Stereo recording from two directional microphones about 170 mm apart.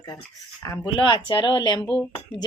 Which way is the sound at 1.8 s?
5° left (ahead or behind).